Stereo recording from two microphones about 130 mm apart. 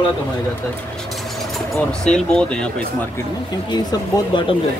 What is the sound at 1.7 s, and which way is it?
Speech, 5° left (ahead or behind).